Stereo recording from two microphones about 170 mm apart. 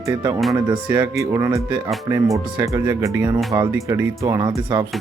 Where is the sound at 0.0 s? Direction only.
15° right (ahead or behind).